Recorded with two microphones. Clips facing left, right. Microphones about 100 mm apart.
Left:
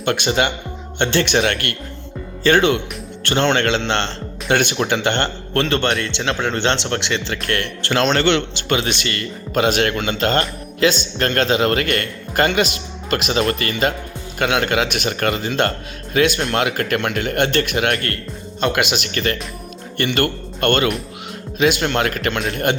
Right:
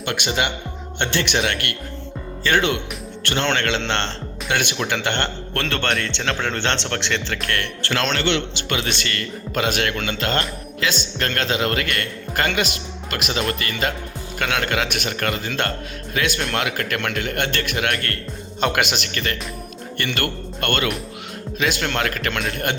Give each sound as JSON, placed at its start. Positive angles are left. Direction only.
{"t": 0.0, "sound": "speech", "side_deg": 35}
{"t": 3.8, "sound": "speech", "side_deg": 20}
{"t": 4.4, "sound": "speech", "side_deg": 35}
{"t": 7.4, "sound": "speech", "side_deg": 25}
{"t": 8.2, "sound": "speech", "side_deg": 50}
{"t": 8.7, "sound": "speech", "side_deg": 20}
{"t": 12.3, "sound": "speech", "side_deg": 20}
{"t": 14.3, "sound": "speech", "side_deg": 20}
{"t": 18.6, "sound": "speech", "side_deg": 0}
{"t": 19.1, "sound": "speech", "side_deg": 30}